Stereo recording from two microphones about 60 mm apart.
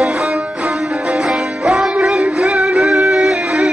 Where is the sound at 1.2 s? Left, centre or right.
Centre.